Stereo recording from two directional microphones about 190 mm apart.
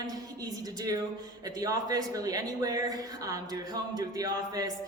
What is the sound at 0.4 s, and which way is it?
Speech, 20° right (ahead or behind).